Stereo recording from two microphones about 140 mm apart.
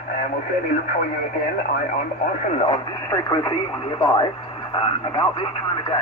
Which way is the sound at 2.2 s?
65° left (ahead or behind).